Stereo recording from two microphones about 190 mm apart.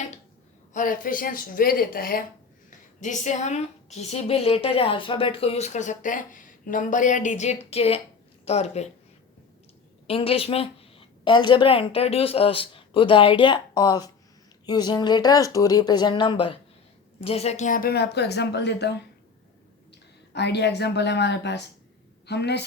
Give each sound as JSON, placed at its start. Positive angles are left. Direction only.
{"t": 0.7, "sound": "a woman's voice", "side_deg": 45}
{"t": 10.1, "sound": "a woman's voice", "side_deg": 30}
{"t": 20.3, "sound": "speech", "side_deg": 60}